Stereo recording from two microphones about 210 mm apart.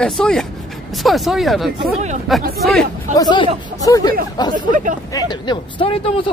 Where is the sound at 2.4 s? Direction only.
45° right (ahead or behind).